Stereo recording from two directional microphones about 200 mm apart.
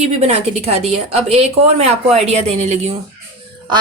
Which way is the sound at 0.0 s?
30° right (ahead or behind).